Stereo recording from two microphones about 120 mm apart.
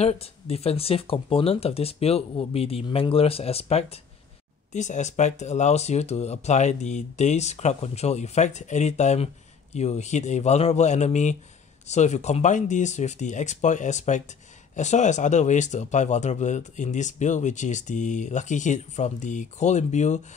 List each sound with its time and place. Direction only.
0.0 s speech: 60° left (ahead or behind)
4.7 s speech: 85° left